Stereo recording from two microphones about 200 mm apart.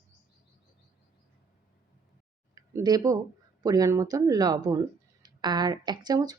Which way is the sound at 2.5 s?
20° right (ahead or behind).